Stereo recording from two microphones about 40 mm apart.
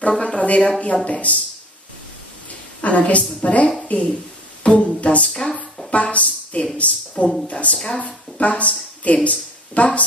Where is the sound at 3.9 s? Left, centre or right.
Left.